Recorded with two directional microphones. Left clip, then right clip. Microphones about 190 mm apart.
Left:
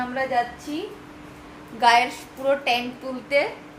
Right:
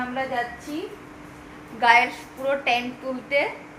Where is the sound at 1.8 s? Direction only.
20° left (ahead or behind).